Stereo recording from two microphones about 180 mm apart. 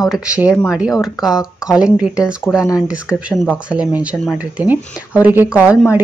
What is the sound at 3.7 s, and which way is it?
Speech, 5° right (ahead or behind).